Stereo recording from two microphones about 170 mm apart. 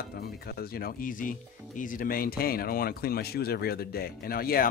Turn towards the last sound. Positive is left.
turn(degrees=60)  # may be behind; listen again after turning